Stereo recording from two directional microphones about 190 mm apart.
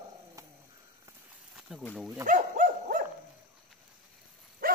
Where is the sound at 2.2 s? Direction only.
45° right (ahead or behind).